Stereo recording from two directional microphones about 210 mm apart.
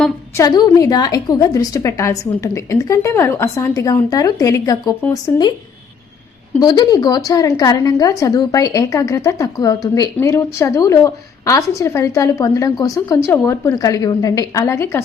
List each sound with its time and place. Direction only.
0.3 s a woman's voice: 20° left (ahead or behind)
6.6 s a woman's voice: 20° left (ahead or behind)